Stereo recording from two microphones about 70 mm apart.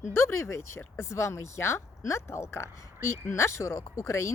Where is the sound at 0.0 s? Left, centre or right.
Left.